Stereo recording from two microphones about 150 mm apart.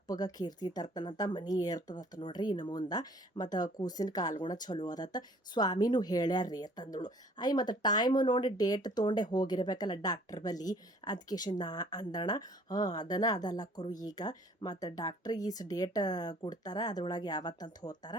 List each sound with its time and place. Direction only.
0.1 s speech: 25° left (ahead or behind)